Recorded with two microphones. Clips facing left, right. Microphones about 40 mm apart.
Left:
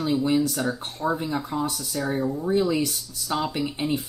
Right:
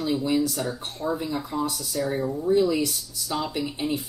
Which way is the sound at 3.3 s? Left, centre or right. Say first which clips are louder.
Left 2 dB; centre.